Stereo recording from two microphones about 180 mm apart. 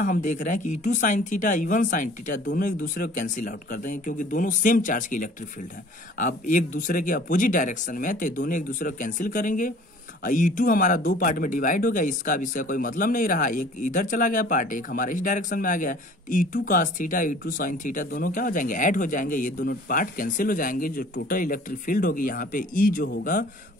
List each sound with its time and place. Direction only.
0.0 s speech: 45° left (ahead or behind)